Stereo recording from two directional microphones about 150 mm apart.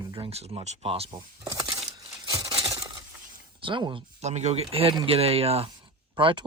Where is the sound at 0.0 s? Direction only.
35° right (ahead or behind).